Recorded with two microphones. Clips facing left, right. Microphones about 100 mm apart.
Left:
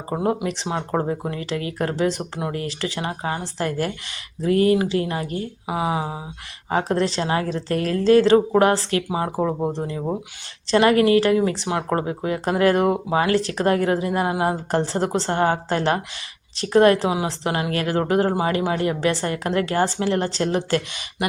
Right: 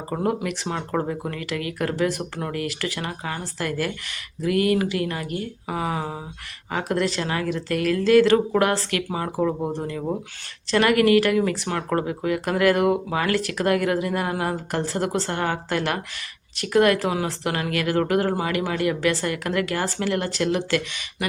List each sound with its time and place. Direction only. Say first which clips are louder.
0.1 s speech: left 2 dB; 20° left (ahead or behind)
5.6 s speech: left 4 dB; 15° left (ahead or behind)
6.7 s a woman's voice: left 3 dB; 30° left (ahead or behind)